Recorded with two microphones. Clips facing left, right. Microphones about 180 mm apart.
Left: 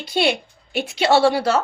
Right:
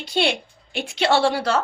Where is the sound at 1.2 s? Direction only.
5° left (ahead or behind).